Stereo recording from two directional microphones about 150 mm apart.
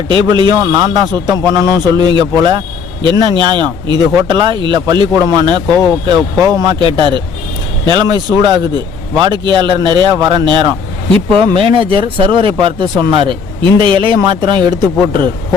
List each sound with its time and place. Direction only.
0.1 s a man's voice: 30° right (ahead or behind)